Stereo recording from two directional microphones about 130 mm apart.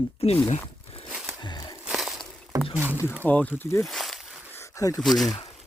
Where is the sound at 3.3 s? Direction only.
15° left (ahead or behind).